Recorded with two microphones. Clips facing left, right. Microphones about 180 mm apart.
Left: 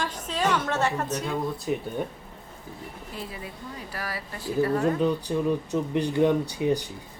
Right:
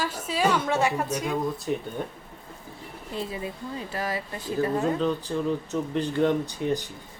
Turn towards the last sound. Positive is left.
turn(degrees=10)  # may be behind; listen again after turning